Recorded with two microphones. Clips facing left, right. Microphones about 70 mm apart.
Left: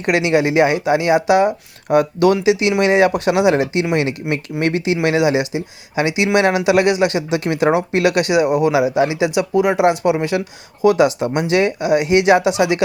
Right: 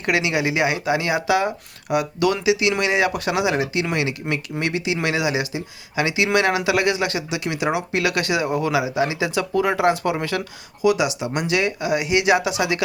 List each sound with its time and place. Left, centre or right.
0.0 s speech: left
10.8 s speech: left